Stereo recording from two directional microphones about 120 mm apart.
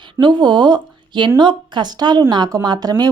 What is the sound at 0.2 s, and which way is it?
A woman's voice, 40° right (ahead or behind).